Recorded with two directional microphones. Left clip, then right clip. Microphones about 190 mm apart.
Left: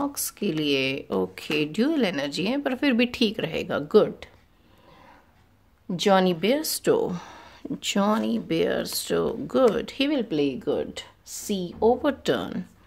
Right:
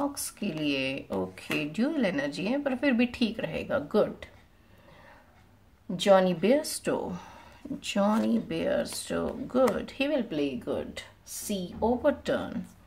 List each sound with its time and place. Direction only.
0.0 s speech: 45° left (ahead or behind)
5.9 s speech: 45° left (ahead or behind)